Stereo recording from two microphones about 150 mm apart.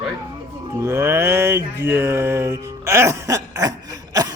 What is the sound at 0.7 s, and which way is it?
Music, 20° right (ahead or behind).